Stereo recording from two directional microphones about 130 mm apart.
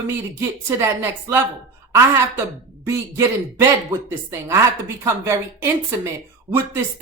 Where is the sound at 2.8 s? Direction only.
20° right (ahead or behind).